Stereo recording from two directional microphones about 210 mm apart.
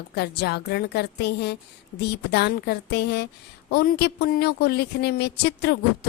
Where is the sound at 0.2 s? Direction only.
50° left (ahead or behind).